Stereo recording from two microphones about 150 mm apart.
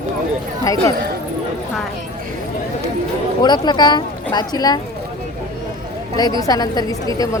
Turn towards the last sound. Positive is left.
turn(degrees=25)  # may be behind; listen again after turning